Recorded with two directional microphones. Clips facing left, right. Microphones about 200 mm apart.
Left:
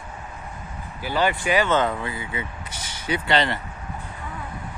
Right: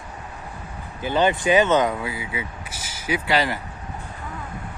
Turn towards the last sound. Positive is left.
turn(degrees=-5)  # may be behind; listen again after turning